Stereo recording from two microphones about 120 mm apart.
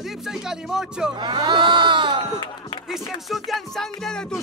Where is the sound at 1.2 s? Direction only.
40° right (ahead or behind).